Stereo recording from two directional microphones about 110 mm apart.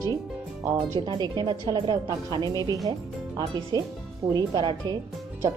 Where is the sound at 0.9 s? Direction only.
45° right (ahead or behind).